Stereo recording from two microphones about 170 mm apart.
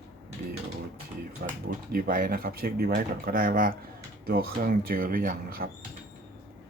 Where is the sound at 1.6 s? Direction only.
60° right (ahead or behind).